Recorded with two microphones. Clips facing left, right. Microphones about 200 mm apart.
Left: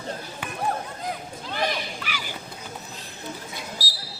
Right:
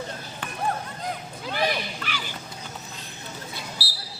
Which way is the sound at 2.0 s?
10° left (ahead or behind).